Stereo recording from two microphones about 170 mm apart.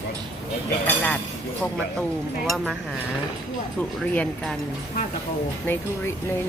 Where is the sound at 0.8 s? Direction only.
10° left (ahead or behind).